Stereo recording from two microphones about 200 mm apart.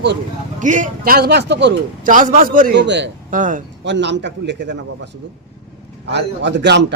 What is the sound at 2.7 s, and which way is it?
Speech, 60° right (ahead or behind).